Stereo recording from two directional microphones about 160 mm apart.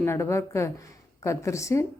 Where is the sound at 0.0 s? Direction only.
15° left (ahead or behind).